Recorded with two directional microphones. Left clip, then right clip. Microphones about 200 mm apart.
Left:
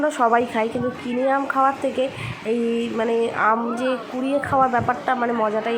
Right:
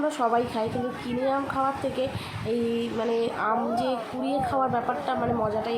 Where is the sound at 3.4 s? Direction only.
20° left (ahead or behind).